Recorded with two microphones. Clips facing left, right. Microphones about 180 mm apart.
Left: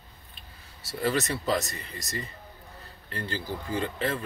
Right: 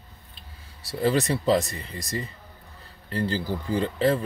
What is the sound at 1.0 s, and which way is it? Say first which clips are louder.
Speech: right 5 dB; 35° right (ahead or behind).